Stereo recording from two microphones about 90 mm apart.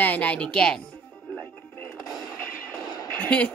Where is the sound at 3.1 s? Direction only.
15° left (ahead or behind).